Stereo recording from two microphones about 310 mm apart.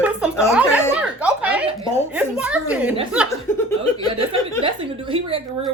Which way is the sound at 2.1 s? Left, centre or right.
Centre.